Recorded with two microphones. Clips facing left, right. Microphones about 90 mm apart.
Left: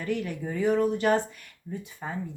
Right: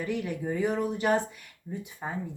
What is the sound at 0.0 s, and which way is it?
A woman's voice, 15° right (ahead or behind).